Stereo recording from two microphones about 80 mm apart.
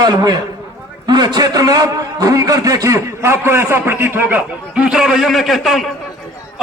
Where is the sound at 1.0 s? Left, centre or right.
Right.